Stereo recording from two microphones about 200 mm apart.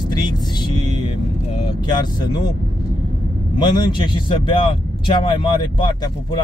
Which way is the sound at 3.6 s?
20° left (ahead or behind).